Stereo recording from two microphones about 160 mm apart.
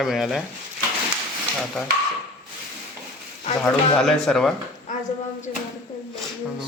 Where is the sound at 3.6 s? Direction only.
Centre (ahead or behind).